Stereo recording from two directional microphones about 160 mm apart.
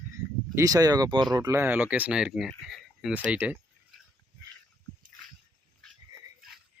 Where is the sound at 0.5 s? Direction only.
20° right (ahead or behind).